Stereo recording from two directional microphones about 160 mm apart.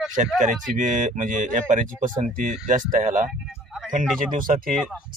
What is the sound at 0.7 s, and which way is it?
Speech, 55° right (ahead or behind).